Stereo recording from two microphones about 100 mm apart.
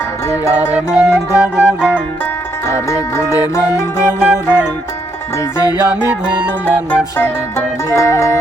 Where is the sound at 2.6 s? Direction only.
30° left (ahead or behind).